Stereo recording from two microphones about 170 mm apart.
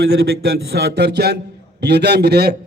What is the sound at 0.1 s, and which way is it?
A man's voice, 65° right (ahead or behind).